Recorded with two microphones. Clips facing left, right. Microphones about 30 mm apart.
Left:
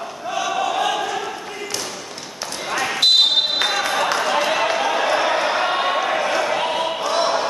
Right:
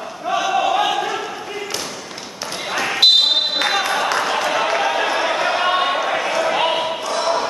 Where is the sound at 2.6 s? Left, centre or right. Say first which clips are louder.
Right 3 dB; centre.